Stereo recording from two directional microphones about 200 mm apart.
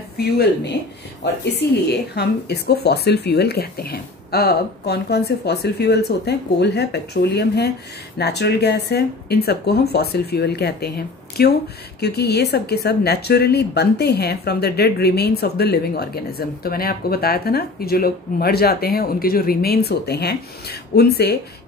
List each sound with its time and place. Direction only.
0.2 s speech: 55° left (ahead or behind)